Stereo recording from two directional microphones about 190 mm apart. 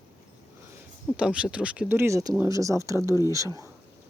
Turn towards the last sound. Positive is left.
turn(degrees=-15)  # may be behind; listen again after turning